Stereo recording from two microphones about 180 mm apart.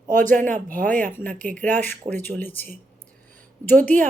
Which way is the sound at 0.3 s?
45° right (ahead or behind).